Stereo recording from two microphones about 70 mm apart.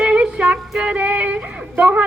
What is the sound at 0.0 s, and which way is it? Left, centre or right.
Music, centre.